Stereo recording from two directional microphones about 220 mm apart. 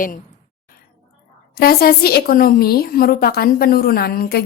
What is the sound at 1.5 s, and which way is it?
A woman's voice, 45° left (ahead or behind).